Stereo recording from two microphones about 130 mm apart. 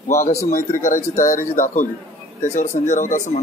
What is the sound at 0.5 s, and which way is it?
Speech, 90° left.